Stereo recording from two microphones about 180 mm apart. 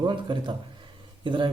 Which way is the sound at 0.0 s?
25° right (ahead or behind).